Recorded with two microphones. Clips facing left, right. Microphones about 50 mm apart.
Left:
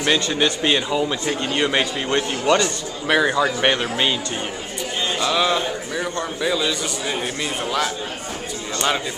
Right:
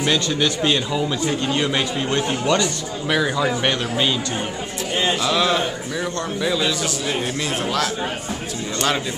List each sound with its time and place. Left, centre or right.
0.0 s a man's voice: centre
5.2 s a man's voice: centre